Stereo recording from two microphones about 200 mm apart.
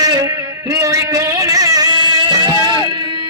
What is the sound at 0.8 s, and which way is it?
Music, 15° right (ahead or behind).